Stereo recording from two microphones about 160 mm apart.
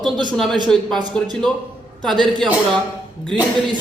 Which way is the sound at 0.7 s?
Centre (ahead or behind).